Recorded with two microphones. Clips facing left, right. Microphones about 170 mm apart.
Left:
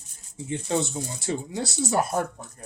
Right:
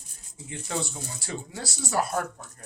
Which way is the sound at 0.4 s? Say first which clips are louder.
Left 6 dB; 25° left (ahead or behind).